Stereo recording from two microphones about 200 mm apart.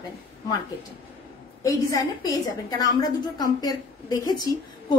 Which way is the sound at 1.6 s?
15° left (ahead or behind).